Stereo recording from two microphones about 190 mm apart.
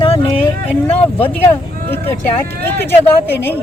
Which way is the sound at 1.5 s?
10° left (ahead or behind).